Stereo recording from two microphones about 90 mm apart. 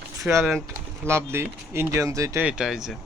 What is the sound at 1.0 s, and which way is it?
Speech, 30° right (ahead or behind).